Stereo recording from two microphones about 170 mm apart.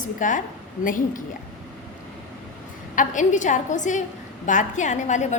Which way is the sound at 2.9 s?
50° left (ahead or behind).